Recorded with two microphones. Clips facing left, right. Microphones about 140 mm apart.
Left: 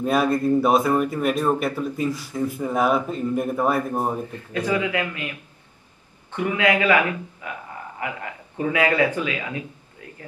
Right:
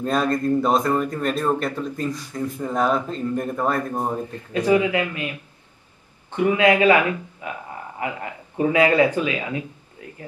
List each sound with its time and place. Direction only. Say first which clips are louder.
0.0 s speech: left 1 dB; 10° left (ahead or behind)
4.6 s a man's voice: right 4 dB; 15° right (ahead or behind)
6.3 s a man's voice: right 4 dB; 25° right (ahead or behind)
8.9 s a man's voice: right 3 dB; 15° right (ahead or behind)